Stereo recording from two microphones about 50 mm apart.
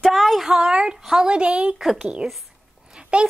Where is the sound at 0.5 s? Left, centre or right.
Centre.